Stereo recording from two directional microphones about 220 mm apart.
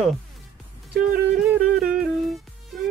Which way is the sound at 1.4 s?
5° right (ahead or behind).